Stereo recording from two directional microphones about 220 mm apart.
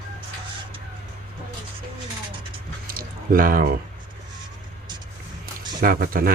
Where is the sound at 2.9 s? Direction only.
40° right (ahead or behind).